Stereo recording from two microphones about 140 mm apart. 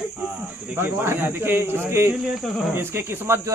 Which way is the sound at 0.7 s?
15° right (ahead or behind).